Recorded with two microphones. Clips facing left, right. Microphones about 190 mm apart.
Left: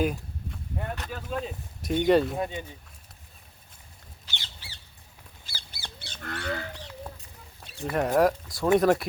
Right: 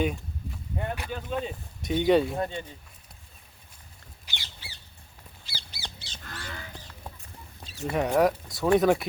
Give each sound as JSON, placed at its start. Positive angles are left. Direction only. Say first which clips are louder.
{"t": 0.0, "sound": "a sound", "louder": "left 1 dB", "side_deg": 0}
{"t": 1.1, "sound": "speech", "louder": "right 1 dB", "side_deg": 0}
{"t": 4.3, "sound": "squawk", "louder": "even", "side_deg": -15}
{"t": 5.5, "sound": "livestock", "louder": "right 1 dB", "side_deg": 50}
{"t": 7.6, "sound": "fowl", "louder": "even", "side_deg": 60}
{"t": 7.9, "sound": "speech", "louder": "left 1 dB", "side_deg": 0}